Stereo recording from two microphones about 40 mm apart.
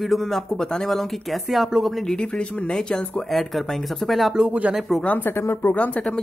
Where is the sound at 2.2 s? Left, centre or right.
Left.